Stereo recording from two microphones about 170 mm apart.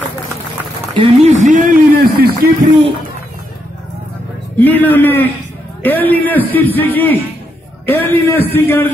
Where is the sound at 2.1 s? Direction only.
65° right (ahead or behind).